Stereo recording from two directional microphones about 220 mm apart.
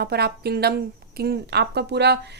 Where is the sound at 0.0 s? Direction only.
45° right (ahead or behind).